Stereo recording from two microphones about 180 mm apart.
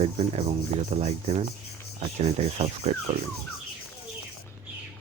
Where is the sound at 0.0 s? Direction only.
35° right (ahead or behind).